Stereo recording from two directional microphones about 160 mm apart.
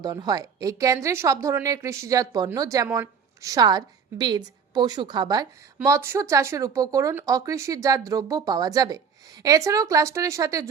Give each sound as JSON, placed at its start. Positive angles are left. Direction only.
{"t": 0.0, "sound": "speech", "side_deg": -25}